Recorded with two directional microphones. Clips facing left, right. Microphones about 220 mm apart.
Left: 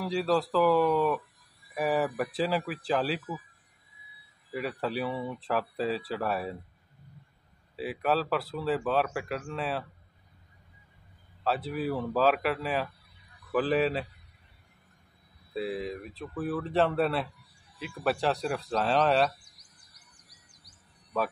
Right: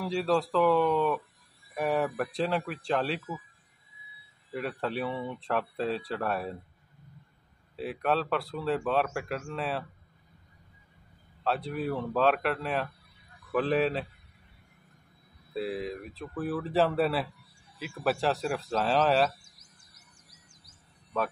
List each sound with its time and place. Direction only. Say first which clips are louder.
0.0 s speech: even; centre (ahead or behind)
4.5 s speech: left 1 dB; centre (ahead or behind)
7.7 s speech: even; 5° left (ahead or behind)
11.4 s speech: left 1 dB; centre (ahead or behind)
15.5 s speech: even; centre (ahead or behind)
19.4 s bird vocalization: right 2 dB; 25° right (ahead or behind)